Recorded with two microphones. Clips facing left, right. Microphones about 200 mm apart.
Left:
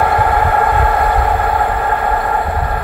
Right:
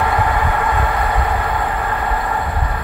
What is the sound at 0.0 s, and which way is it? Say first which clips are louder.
Train: left 4 dB; 50° left (ahead or behind).